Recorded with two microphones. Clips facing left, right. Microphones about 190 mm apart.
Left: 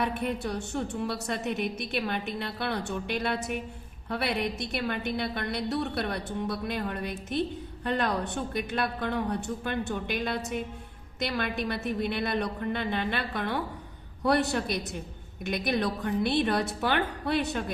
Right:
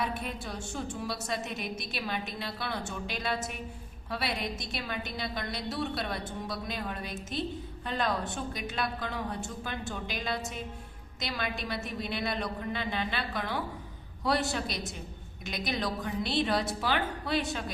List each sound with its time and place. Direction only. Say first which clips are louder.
0.0 s a woman's voice: left 5 dB; 60° left (ahead or behind)